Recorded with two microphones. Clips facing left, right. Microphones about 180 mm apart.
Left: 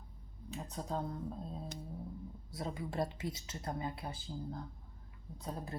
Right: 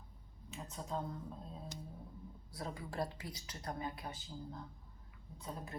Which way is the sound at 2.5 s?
25° left (ahead or behind).